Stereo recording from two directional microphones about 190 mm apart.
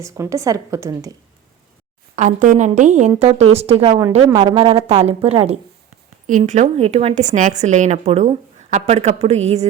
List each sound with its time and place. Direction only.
0.0 s a woman's voice: 15° right (ahead or behind)
2.1 s a woman's voice: 40° right (ahead or behind)